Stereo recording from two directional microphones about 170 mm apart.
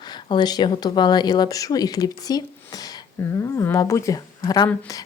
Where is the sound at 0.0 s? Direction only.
25° left (ahead or behind).